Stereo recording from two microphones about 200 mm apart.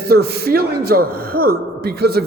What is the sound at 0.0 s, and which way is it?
A man's voice, 50° right (ahead or behind).